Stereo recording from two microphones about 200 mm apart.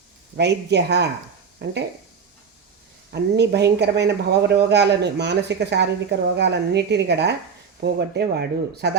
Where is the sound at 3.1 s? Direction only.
55° right (ahead or behind).